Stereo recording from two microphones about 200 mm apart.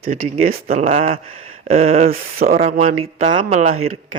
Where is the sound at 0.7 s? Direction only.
35° right (ahead or behind).